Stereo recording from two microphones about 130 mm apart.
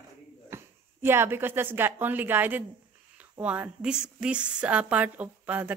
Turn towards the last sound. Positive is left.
turn(degrees=-10)  # may be behind; listen again after turning